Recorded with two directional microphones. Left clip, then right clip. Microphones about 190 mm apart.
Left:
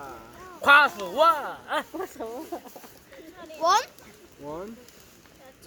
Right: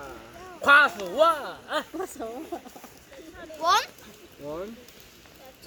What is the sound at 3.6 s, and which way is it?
Speech, 55° left (ahead or behind).